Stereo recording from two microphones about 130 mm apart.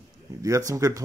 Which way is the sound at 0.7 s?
25° right (ahead or behind).